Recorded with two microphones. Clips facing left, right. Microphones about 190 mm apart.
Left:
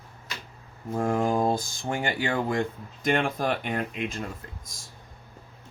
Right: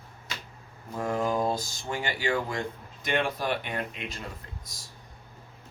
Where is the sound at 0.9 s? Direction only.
50° left (ahead or behind).